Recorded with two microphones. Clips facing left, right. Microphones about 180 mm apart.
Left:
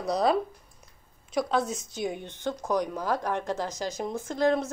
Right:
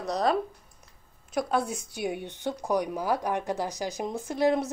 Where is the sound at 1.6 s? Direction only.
60° right (ahead or behind).